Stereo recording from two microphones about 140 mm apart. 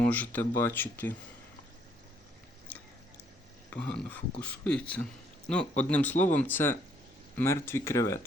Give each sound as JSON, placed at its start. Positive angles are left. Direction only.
{"t": 0.0, "sound": "speech", "side_deg": 10}
{"t": 3.8, "sound": "speech", "side_deg": 10}